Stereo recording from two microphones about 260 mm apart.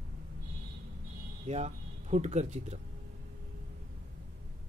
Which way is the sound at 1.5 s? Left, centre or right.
Right.